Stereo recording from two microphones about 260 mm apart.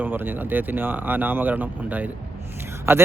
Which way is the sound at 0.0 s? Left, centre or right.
Centre.